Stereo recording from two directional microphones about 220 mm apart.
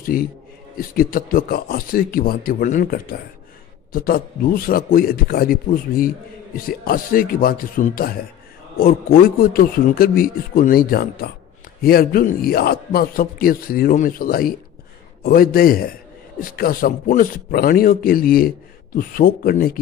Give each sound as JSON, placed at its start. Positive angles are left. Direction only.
{"t": 0.0, "sound": "a man's voice", "side_deg": 40}